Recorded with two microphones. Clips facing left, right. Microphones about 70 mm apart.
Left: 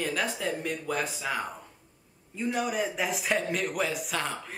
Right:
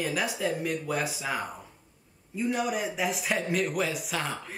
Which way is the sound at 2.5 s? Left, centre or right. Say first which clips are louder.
Left 1 dB; centre.